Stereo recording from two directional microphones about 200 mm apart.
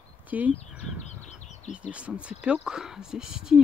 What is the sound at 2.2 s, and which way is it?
Speech, 5° right (ahead or behind).